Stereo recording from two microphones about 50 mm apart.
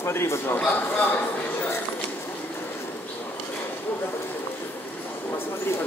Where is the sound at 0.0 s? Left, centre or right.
Left.